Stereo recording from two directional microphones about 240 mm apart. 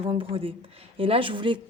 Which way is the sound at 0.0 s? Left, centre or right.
Right.